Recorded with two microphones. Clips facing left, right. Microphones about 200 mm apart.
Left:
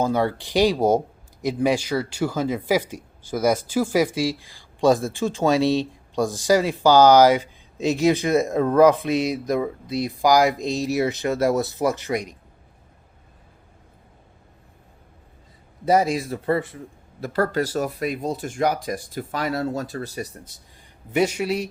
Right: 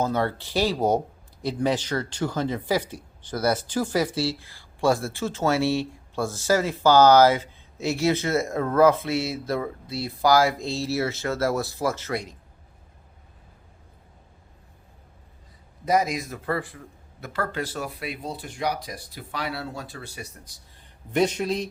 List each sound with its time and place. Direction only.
0.0 s speech: 15° left (ahead or behind)
15.9 s a man's voice: 30° left (ahead or behind)
17.2 s speech: 40° left (ahead or behind)
21.1 s speech: 10° left (ahead or behind)